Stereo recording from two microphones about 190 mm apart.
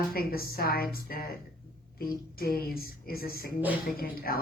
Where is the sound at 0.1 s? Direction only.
50° left (ahead or behind).